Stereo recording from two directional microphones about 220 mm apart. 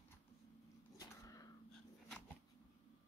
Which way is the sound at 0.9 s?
15° left (ahead or behind).